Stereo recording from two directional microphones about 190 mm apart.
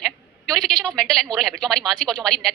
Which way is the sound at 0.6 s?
5° left (ahead or behind).